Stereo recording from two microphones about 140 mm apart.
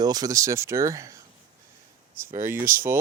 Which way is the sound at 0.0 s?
30° right (ahead or behind).